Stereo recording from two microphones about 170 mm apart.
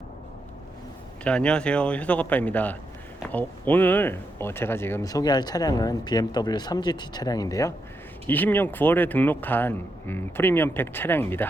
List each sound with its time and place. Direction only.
1.2 s speech: 5° left (ahead or behind)